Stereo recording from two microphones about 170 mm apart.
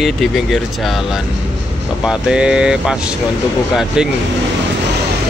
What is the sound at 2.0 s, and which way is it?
Speech, 5° right (ahead or behind).